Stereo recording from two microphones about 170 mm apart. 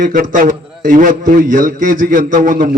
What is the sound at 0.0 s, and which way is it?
A man's voice, 55° right (ahead or behind).